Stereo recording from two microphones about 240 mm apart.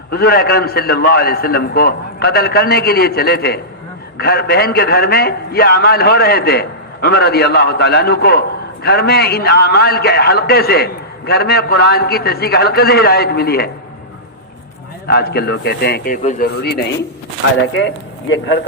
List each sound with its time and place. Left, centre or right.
0.1 s a man's voice: left
15.0 s a man's voice: left
17.7 s speech: left